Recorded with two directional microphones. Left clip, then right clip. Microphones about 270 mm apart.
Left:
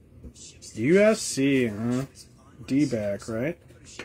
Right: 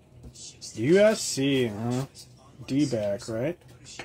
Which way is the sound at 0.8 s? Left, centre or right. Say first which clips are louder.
Even; centre.